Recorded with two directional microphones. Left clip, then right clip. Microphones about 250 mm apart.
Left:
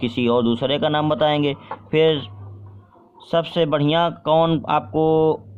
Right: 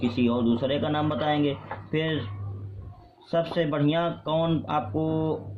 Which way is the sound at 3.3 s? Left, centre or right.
Left.